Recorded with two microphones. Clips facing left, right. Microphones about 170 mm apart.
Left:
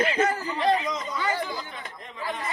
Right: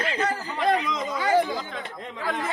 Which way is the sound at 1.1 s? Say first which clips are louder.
Right 11 dB; 90° right.